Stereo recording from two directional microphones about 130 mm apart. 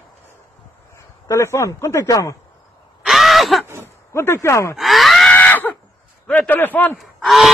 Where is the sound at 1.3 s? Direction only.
20° left (ahead or behind).